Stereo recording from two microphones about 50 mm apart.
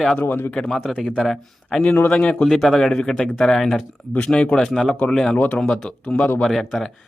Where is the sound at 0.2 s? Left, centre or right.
Left.